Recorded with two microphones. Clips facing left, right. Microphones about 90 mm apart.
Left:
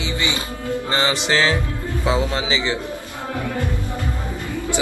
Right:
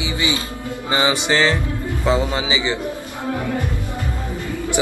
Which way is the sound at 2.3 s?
5° right (ahead or behind).